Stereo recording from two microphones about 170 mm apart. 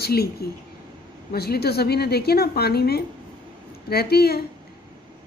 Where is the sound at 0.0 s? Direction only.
65° left (ahead or behind).